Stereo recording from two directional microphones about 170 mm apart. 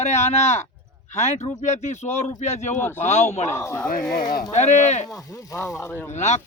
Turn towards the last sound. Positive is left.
turn(degrees=40)  # may be behind; listen again after turning